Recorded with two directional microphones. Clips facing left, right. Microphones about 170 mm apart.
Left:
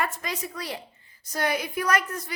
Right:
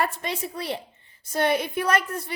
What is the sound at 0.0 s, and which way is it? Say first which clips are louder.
A woman's voice: right 3 dB; 30° right (ahead or behind).